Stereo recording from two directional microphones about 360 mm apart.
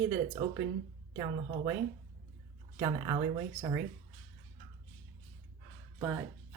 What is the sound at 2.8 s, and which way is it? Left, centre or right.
Speech, centre.